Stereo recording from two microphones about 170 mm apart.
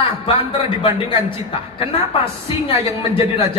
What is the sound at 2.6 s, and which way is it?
Speech, 35° left (ahead or behind).